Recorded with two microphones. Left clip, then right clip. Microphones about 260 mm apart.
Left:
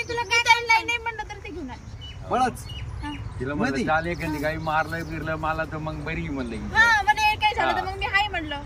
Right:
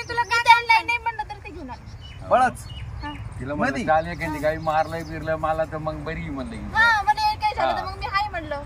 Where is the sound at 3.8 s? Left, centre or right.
Centre.